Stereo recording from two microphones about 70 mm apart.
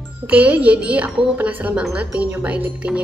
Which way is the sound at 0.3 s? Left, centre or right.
Centre.